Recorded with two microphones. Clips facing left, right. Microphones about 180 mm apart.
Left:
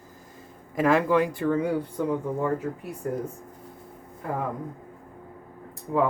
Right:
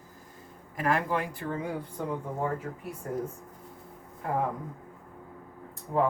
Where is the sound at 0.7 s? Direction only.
90° left.